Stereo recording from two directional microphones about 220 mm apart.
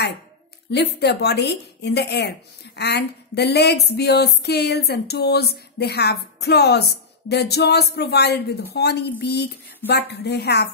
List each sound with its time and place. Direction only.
0.7 s speech: 50° left (ahead or behind)